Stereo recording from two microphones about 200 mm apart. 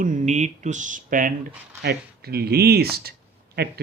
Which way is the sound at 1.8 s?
55° right (ahead or behind).